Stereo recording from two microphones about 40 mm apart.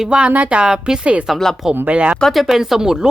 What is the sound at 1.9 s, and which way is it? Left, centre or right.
Speech, right.